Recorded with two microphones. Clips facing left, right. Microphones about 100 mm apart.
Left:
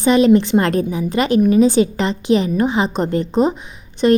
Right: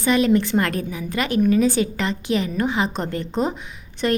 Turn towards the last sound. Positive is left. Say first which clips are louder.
# left 8 dB
turn(degrees=25)  # may be behind; listen again after turning